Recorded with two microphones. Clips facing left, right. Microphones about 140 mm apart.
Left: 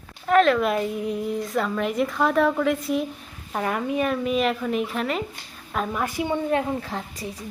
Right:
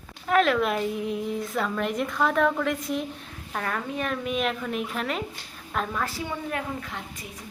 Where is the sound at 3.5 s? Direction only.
15° left (ahead or behind); by 7.3 s 35° left (ahead or behind).